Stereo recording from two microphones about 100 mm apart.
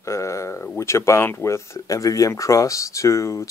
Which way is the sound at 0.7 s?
30° left (ahead or behind).